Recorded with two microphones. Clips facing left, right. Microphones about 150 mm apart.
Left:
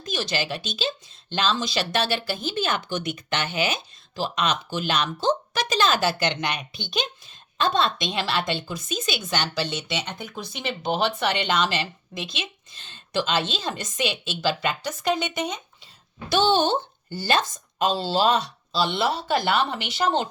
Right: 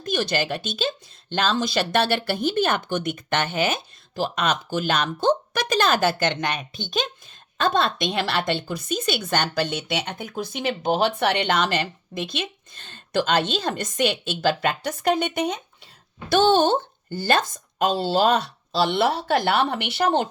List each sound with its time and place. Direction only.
0.0 s speech: 55° right (ahead or behind)